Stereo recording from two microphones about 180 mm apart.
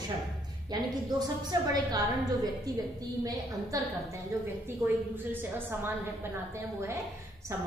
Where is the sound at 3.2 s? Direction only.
20° right (ahead or behind).